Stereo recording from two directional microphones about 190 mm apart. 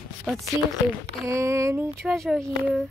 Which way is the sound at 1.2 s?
15° right (ahead or behind).